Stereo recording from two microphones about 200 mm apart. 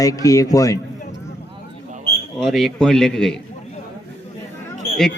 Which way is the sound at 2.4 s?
Centre (ahead or behind).